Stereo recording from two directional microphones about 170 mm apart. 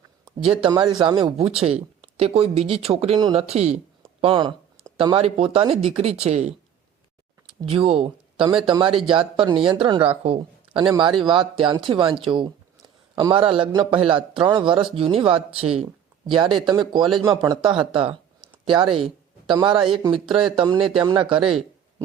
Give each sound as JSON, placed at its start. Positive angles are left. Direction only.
{"t": 0.6, "sound": "a man's voice", "side_deg": -30}
{"t": 7.6, "sound": "a man's voice", "side_deg": -35}
{"t": 21.3, "sound": "speech", "side_deg": -5}